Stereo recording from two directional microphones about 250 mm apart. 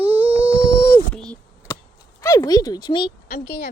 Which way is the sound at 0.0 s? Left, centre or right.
Centre.